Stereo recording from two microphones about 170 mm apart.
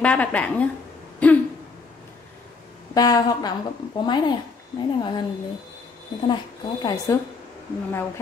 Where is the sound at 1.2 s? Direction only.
10° left (ahead or behind).